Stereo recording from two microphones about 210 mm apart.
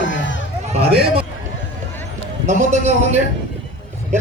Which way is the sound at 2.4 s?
35° right (ahead or behind).